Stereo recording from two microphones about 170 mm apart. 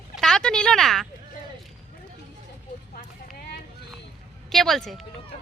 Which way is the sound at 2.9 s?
60° left (ahead or behind).